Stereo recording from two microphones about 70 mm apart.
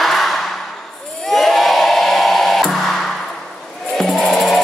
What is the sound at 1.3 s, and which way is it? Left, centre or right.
Music, centre.